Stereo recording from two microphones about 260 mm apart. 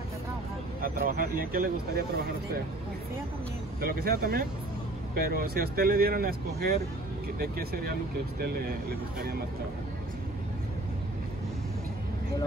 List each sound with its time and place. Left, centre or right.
0.7 s speech: right
3.8 s speech: right